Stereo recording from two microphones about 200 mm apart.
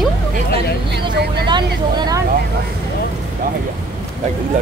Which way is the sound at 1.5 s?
20° right (ahead or behind).